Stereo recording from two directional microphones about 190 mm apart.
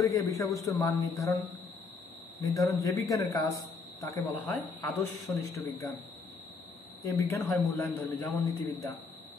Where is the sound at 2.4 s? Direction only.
15° left (ahead or behind).